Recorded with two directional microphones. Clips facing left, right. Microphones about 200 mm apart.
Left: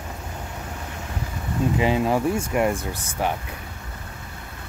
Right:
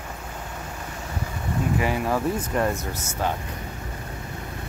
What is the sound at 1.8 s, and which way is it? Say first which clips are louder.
Speech: left 5 dB; 20° left (ahead or behind).